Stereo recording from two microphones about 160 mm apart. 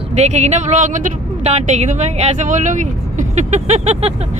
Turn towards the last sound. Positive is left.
turn(degrees=-45)  # may be behind; listen again after turning